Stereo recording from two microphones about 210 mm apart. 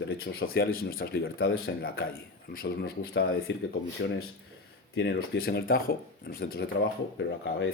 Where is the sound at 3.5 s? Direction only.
60° left (ahead or behind).